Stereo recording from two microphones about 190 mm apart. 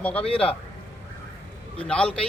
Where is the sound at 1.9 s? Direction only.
5° left (ahead or behind).